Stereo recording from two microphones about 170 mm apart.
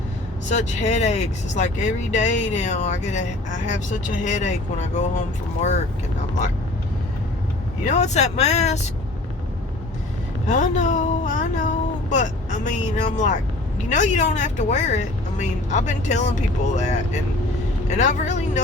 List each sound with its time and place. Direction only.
0.4 s speech: 45° left (ahead or behind)
7.9 s speech: 45° left (ahead or behind)
10.5 s speech: 45° left (ahead or behind)